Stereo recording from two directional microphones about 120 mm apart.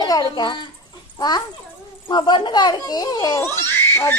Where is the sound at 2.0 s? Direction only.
40° left (ahead or behind).